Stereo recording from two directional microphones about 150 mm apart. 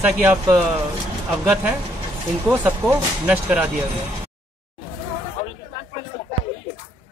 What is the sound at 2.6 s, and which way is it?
Speech, 10° right (ahead or behind).